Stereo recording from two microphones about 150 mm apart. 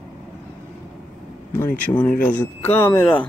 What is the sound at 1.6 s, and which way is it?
Speech, 20° left (ahead or behind).